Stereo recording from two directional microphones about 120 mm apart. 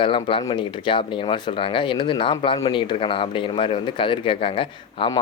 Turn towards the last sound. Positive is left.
turn(degrees=50)  # may be behind; listen again after turning